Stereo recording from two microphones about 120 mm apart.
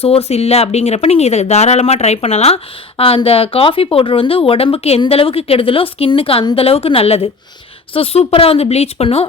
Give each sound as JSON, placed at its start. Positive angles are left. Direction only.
{"t": 0.0, "sound": "speech", "side_deg": 55}